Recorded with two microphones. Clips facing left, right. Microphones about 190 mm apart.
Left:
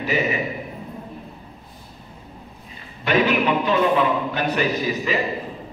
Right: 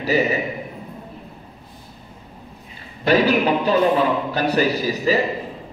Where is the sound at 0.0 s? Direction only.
40° right (ahead or behind).